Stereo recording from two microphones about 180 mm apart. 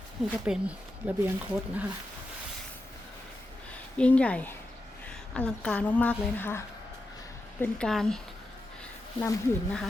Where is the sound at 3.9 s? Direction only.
5° left (ahead or behind).